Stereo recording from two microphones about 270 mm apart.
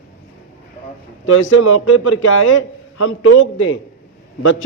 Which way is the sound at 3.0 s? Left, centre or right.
Left.